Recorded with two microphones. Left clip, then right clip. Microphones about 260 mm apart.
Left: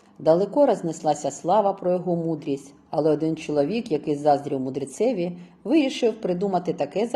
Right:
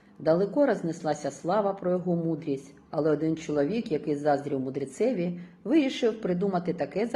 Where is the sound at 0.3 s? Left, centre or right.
Left.